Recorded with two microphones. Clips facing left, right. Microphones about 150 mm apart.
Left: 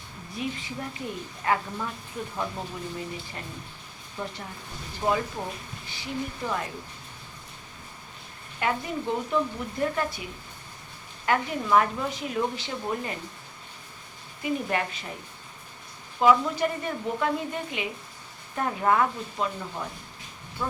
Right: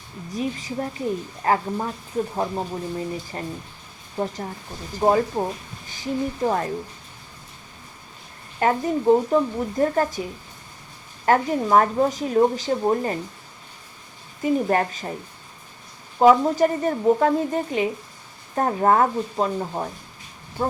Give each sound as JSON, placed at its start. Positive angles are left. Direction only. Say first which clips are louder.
{"t": 0.3, "sound": "speech", "louder": "right 6 dB", "side_deg": -40}
{"t": 8.5, "sound": "speech", "louder": "right 7 dB", "side_deg": -40}
{"t": 11.3, "sound": "speech", "louder": "right 6 dB", "side_deg": -40}
{"t": 14.4, "sound": "speech", "louder": "right 7 dB", "side_deg": -40}
{"t": 16.1, "sound": "speech", "louder": "right 6 dB", "side_deg": -40}